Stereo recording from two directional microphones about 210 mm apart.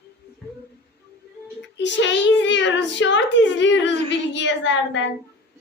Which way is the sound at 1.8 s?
60° left (ahead or behind).